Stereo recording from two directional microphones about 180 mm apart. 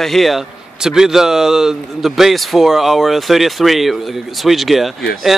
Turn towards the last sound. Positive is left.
turn(degrees=0)  # may be behind; listen again after turning